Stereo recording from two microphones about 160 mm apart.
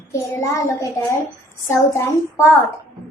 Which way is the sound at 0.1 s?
20° left (ahead or behind).